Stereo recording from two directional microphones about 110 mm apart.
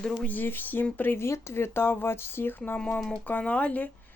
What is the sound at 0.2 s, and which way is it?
Speech, 15° left (ahead or behind).